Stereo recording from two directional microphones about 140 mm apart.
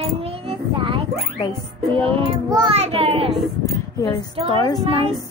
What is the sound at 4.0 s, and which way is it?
Speech, 30° left (ahead or behind).